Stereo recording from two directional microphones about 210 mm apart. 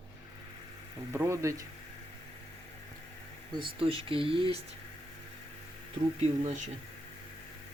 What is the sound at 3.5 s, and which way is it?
Speech, 25° right (ahead or behind).